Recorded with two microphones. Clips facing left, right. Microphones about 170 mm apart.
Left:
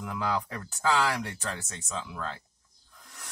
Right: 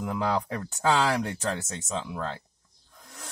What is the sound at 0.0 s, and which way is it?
Speech, 30° right (ahead or behind).